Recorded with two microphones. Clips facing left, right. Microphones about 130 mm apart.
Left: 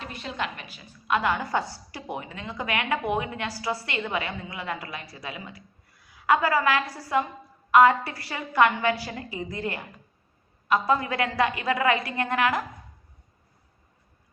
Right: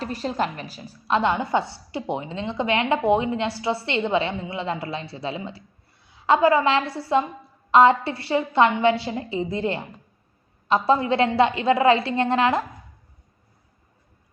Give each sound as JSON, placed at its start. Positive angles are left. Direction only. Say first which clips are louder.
{"t": 0.0, "sound": "a woman's voice", "louder": "right 7 dB", "side_deg": -35}